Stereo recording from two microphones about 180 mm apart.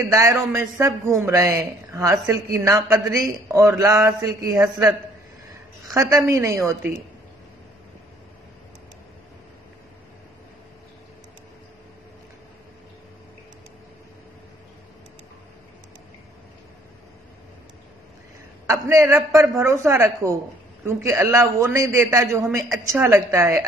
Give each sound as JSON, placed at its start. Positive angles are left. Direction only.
{"t": 0.0, "sound": "speech", "side_deg": -15}
{"t": 5.9, "sound": "speech", "side_deg": -20}
{"t": 18.7, "sound": "speech", "side_deg": -15}